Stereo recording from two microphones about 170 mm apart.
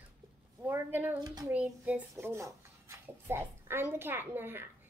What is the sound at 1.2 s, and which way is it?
Speech, 20° right (ahead or behind).